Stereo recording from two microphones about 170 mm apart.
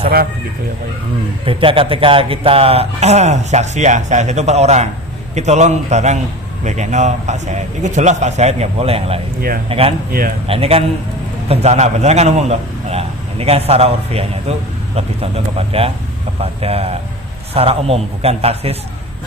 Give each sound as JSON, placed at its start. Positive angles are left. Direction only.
{"t": 1.5, "sound": "a man's voice", "side_deg": -30}
{"t": 10.1, "sound": "speech", "side_deg": -60}
{"t": 10.4, "sound": "speech", "side_deg": -35}